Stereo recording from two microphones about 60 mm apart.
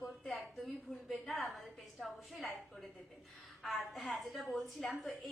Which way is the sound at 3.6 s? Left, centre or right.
Centre.